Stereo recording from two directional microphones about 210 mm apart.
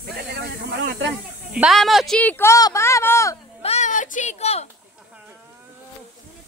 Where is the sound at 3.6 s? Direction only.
30° left (ahead or behind).